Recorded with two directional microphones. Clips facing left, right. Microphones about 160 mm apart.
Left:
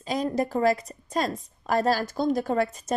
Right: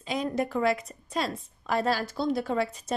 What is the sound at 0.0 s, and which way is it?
A woman's voice, 40° left (ahead or behind).